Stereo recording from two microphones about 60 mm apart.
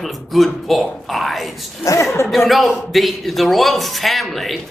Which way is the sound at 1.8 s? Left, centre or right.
Left.